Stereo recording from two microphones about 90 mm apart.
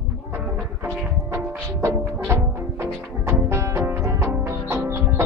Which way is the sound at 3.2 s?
30° right (ahead or behind).